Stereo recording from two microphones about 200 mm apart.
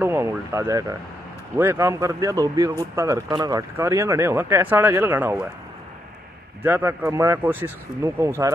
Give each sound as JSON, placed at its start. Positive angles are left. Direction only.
{"t": 0.0, "sound": "speech", "side_deg": -15}
{"t": 6.6, "sound": "speech", "side_deg": -10}